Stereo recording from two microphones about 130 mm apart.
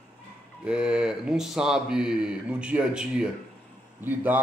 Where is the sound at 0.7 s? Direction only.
5° right (ahead or behind).